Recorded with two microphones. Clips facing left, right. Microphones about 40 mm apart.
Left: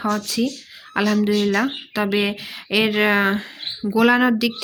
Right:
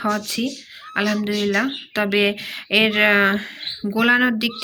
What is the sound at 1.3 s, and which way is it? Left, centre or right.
Speech, right.